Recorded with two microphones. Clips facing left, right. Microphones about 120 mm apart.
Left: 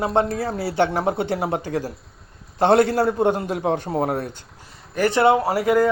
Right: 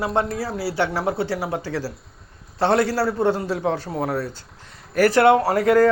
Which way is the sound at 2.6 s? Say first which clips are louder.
Left 3 dB; 25° left (ahead or behind).